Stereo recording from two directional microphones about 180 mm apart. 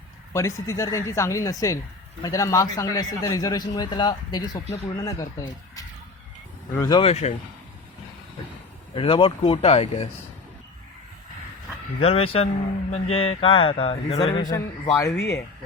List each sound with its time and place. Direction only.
0.3 s a man's voice: 15° left (ahead or behind)
7.0 s a man's voice: 35° left (ahead or behind)
9.0 s a man's voice: 30° left (ahead or behind)
11.9 s a man's voice: 30° left (ahead or behind)
14.5 s speech: 20° left (ahead or behind)
15.2 s speech: 65° left (ahead or behind)